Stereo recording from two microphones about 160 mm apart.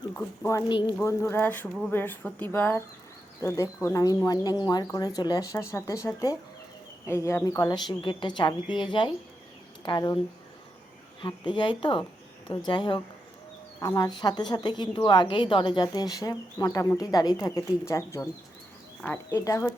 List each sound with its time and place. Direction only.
0.2 s a woman's voice: 20° left (ahead or behind)
11.2 s a woman's voice: 30° left (ahead or behind)